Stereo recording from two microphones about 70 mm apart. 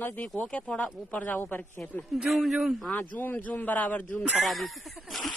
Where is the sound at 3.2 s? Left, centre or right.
Left.